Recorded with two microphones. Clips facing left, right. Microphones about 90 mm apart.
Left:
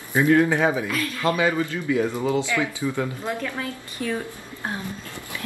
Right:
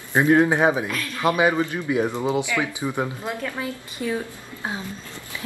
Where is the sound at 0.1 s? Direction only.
25° right (ahead or behind).